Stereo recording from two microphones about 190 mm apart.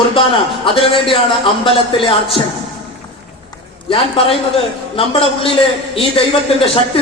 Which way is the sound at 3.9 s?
30° left (ahead or behind).